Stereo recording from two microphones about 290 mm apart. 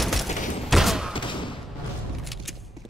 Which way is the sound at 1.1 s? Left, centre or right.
Centre.